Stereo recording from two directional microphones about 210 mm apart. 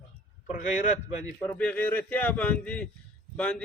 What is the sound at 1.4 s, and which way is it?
A man's voice, 5° left (ahead or behind).